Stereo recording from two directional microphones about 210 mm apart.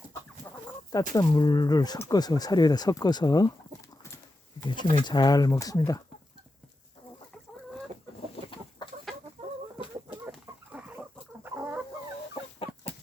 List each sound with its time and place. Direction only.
0.9 s speech: 15° left (ahead or behind)
8.4 s chicken: 25° left (ahead or behind)
10.1 s chicken: 5° right (ahead or behind)